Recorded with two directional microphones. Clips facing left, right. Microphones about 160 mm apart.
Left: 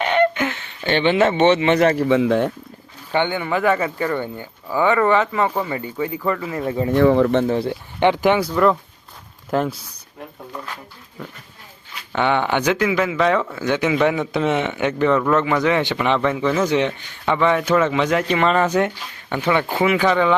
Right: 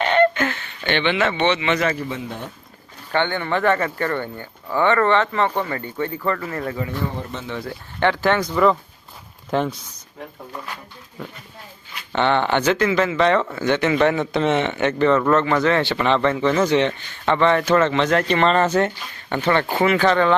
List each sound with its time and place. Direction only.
0.0 s a sound: 15° left (ahead or behind)
0.9 s speech: 40° left (ahead or behind); by 2.5 s 90° left
3.1 s speech: 10° left (ahead or behind)
6.9 s speech: 90° left
7.4 s speech: 30° left (ahead or behind)
7.9 s speech: 15° left (ahead or behind)
12.1 s speech: 10° left (ahead or behind)